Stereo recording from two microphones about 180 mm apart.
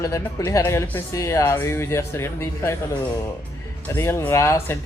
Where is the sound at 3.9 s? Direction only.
15° left (ahead or behind).